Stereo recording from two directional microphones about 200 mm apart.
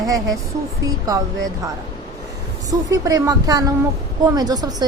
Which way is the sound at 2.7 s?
15° right (ahead or behind).